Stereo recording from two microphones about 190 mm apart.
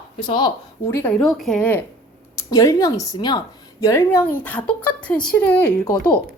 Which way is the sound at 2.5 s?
15° left (ahead or behind).